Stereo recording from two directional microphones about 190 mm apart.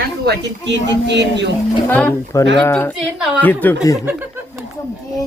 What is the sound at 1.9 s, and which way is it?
Speech, 5° left (ahead or behind).